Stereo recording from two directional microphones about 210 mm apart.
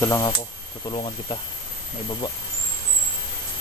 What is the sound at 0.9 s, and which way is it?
Speech, 25° left (ahead or behind).